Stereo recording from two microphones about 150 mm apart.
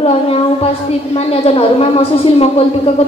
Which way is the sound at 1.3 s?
40° left (ahead or behind).